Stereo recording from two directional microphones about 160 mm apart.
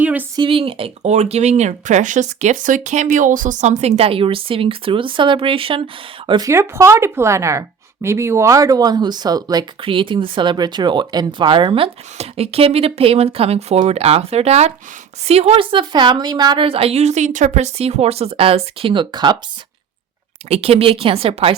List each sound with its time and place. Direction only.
0.0 s a sound: 10° right (ahead or behind)
0.3 s speech: 35° right (ahead or behind)
6.5 s speech: 15° right (ahead or behind)
20.5 s speech: 40° right (ahead or behind)